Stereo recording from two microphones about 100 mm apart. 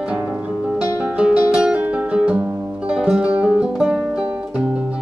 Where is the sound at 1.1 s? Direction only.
10° right (ahead or behind).